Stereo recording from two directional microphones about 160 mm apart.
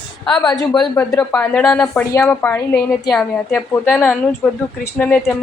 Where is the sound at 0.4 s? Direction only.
25° left (ahead or behind).